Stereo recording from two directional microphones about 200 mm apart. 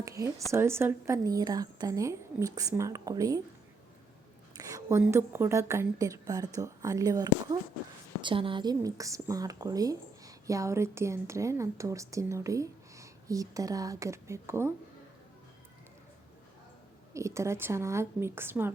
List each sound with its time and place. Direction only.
0.0 s a sound: 15° right (ahead or behind)
0.5 s speech: 10° right (ahead or behind)
4.5 s speech: 15° right (ahead or behind)
17.2 s speech: 15° right (ahead or behind)